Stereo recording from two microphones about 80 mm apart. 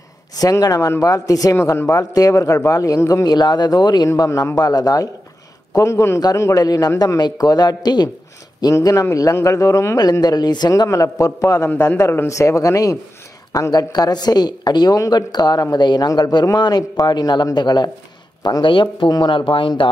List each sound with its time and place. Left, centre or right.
0.4 s speech: left
1.6 s a man's voice: left
3.3 s speech: left
5.8 s a man's voice: left
6.6 s speech: left
9.1 s a man's voice: left
10.2 s speech: left
10.9 s a man's voice: left
11.7 s a man's voice: left
18.4 s speech: left